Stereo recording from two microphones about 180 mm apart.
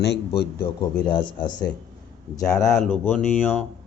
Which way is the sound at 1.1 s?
25° left (ahead or behind).